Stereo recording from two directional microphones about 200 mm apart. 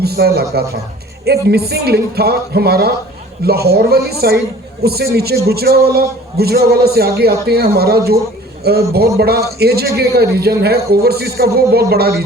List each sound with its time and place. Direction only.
0.0 s speech: 50° right (ahead or behind)